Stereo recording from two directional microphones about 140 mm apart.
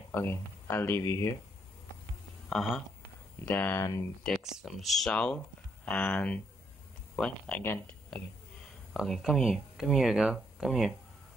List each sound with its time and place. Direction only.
0.1 s speech: 15° left (ahead or behind)
2.5 s speech: centre (ahead or behind)
3.4 s speech: 10° left (ahead or behind)
4.2 s speech: 5° left (ahead or behind)